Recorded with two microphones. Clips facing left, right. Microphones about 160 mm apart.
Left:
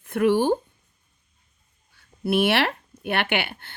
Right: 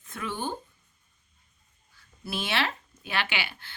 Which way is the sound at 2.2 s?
60° left (ahead or behind).